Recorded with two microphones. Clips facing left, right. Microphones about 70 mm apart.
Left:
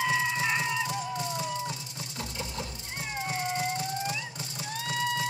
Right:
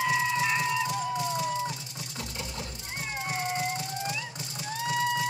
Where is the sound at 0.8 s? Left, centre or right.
Right.